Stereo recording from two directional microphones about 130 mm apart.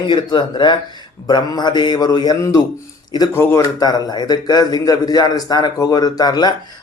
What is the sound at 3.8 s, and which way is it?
Speech, 30° left (ahead or behind).